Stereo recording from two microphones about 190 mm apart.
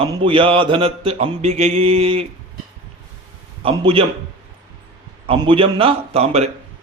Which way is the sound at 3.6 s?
30° right (ahead or behind).